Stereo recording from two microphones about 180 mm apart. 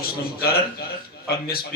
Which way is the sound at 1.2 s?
55° left (ahead or behind).